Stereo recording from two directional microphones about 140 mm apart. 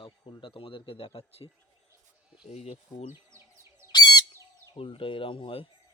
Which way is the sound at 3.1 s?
20° right (ahead or behind).